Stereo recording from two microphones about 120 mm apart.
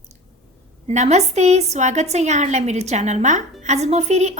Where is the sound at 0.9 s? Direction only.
70° right (ahead or behind).